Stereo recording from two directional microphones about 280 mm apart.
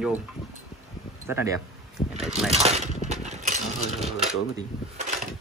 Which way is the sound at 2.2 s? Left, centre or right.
Centre.